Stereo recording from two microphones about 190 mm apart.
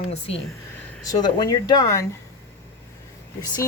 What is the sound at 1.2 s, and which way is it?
Speech, 20° left (ahead or behind).